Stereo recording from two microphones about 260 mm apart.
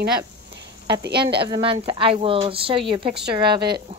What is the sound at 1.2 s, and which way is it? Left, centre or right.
A woman's voice, centre.